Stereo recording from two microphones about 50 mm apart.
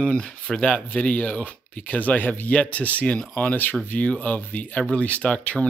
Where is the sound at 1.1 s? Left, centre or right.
Left.